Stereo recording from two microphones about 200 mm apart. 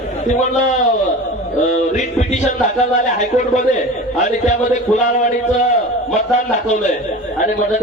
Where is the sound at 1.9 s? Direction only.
35° left (ahead or behind).